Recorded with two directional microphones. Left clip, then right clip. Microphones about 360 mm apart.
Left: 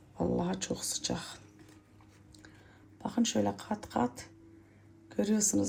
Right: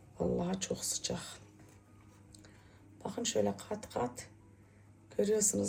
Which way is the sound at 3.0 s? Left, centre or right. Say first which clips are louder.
Left 2 dB; left.